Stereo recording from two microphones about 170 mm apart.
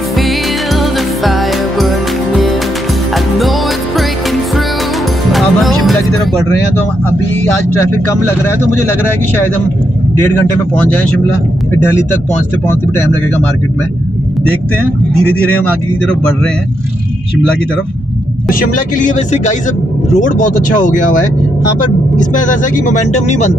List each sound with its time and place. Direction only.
3.3 s music: centre (ahead or behind)
5.3 s music: centre (ahead or behind)
18.5 s speech: 50° left (ahead or behind)
22.2 s speech: 50° left (ahead or behind)